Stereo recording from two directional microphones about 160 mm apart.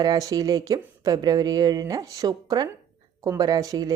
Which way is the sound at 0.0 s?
25° right (ahead or behind).